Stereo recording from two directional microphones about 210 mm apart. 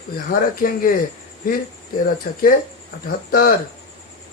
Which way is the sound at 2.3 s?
45° left (ahead or behind).